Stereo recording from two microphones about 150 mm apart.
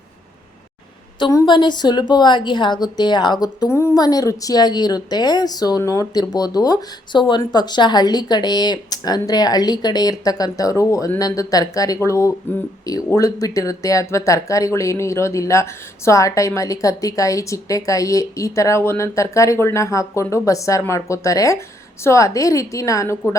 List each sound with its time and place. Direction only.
1.3 s speech: 25° left (ahead or behind)